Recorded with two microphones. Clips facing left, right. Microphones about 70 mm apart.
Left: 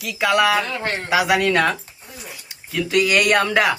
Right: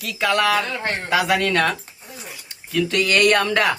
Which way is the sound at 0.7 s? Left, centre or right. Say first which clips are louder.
Left 1 dB; centre.